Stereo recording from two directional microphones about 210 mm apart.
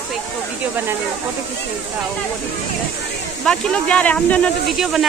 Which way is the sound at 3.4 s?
5° left (ahead or behind).